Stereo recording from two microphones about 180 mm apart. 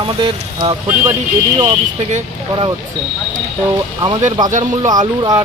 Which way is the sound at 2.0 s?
40° right (ahead or behind).